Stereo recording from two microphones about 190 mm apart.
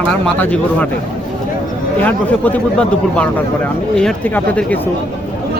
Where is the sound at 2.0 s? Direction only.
10° left (ahead or behind).